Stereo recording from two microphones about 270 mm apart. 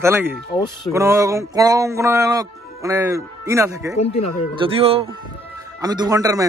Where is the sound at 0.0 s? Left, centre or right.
Centre.